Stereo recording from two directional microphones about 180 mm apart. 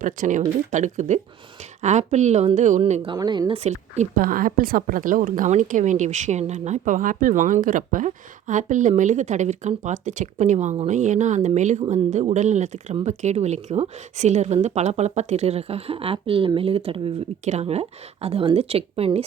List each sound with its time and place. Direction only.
0.0 s a woman's voice: 45° right (ahead or behind)